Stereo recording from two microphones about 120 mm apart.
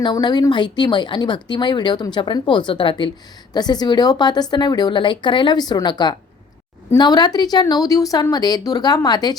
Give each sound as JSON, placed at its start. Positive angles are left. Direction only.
{"t": 0.0, "sound": "speech", "side_deg": 35}